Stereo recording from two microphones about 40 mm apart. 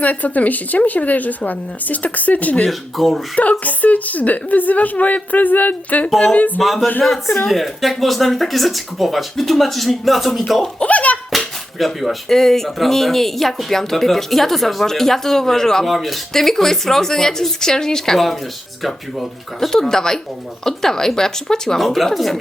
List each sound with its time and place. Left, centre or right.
0.0 s a woman's voice: left
2.6 s speech: centre
3.6 s a woman's voice: left
6.6 s speech: centre
10.8 s speech: left
11.3 s a sound: centre
12.3 s speech: centre
15.9 s speech: centre
16.3 s speech: centre
21.8 s speech: centre